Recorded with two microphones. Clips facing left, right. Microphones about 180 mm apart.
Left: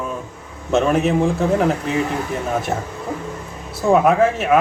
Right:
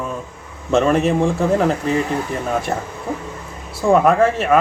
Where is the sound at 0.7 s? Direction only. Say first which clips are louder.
Right 1 dB; 5° left (ahead or behind).